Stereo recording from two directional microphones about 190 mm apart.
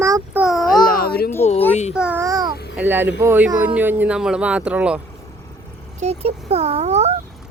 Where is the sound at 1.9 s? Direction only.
5° right (ahead or behind).